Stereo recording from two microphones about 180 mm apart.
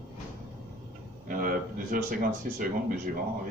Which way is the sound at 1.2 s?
50° right (ahead or behind).